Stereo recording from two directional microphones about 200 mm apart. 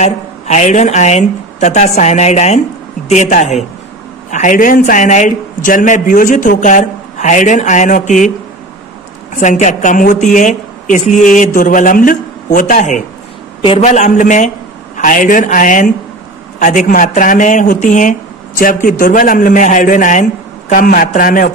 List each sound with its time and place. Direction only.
0.0 s a man's voice: 35° left (ahead or behind)
9.3 s a man's voice: 40° left (ahead or behind)